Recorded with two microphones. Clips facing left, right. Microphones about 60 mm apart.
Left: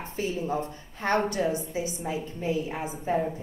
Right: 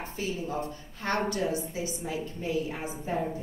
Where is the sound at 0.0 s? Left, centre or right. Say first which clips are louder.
Left 3 dB; left.